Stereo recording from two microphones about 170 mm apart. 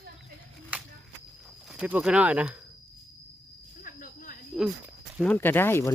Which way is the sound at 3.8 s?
55° left (ahead or behind).